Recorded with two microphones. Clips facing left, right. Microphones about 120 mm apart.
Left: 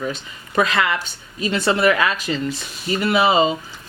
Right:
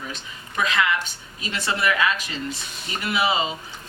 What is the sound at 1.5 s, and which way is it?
Speech, 45° left (ahead or behind).